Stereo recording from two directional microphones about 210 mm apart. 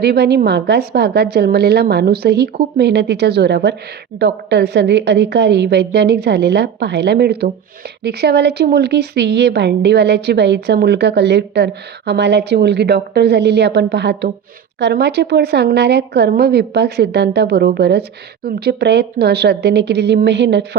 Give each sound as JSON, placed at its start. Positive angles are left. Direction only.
{"t": 0.0, "sound": "a woman's voice", "side_deg": -50}